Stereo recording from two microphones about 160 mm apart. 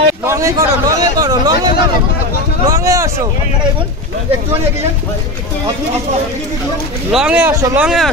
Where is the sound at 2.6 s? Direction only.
20° right (ahead or behind).